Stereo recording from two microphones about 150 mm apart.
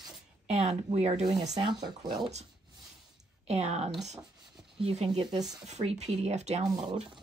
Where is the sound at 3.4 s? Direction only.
45° right (ahead or behind).